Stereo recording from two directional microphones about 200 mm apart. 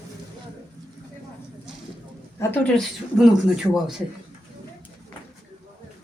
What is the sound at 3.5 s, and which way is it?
Speech, centre (ahead or behind).